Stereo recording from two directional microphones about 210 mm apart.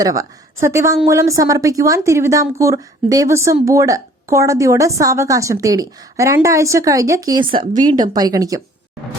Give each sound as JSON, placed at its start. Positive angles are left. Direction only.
{"t": 0.0, "sound": "speech", "side_deg": -15}